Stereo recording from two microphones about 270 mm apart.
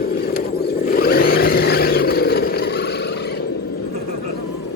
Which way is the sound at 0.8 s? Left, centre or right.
Left.